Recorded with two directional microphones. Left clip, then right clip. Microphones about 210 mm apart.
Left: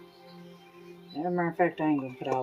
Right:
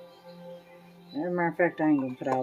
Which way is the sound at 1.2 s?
15° right (ahead or behind).